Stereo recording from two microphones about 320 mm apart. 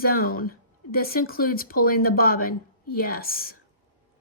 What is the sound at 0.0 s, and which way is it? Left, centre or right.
Speech, left.